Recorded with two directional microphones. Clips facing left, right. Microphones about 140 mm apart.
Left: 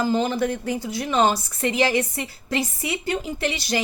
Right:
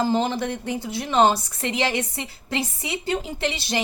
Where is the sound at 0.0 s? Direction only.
25° right (ahead or behind).